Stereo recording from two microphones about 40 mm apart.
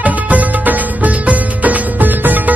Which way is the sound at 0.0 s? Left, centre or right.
Right.